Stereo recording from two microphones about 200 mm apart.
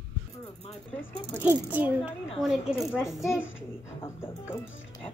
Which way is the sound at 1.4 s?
10° right (ahead or behind).